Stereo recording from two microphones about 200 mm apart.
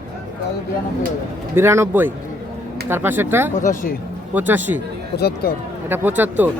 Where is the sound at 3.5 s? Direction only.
40° left (ahead or behind).